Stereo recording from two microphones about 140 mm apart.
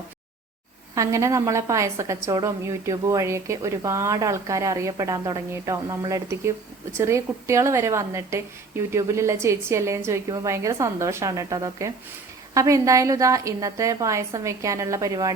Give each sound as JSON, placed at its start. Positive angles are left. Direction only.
{"t": 0.9, "sound": "a woman's voice", "side_deg": -20}